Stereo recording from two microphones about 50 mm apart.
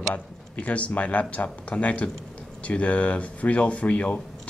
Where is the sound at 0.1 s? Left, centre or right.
Left.